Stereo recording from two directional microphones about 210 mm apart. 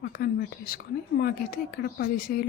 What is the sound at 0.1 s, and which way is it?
Speech, 45° left (ahead or behind).